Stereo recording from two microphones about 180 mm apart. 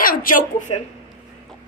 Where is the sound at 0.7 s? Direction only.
30° left (ahead or behind).